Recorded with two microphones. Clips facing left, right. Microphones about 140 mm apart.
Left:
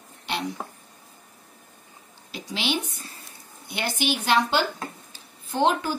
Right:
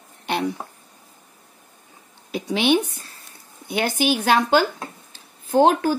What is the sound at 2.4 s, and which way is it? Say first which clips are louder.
A woman's voice: right 9 dB; 55° right (ahead or behind).